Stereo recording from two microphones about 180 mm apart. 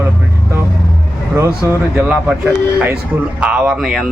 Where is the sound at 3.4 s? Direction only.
5° right (ahead or behind).